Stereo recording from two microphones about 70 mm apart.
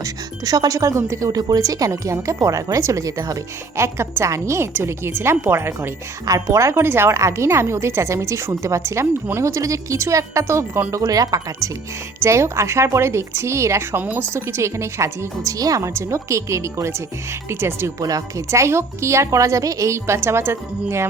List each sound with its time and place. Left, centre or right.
0.0 s speech: right
1.3 s speech: right
3.8 s speech: right
6.2 s speech: right
10.9 s speech: right
12.2 s speech: right
16.0 s speech: right
18.0 s speech: right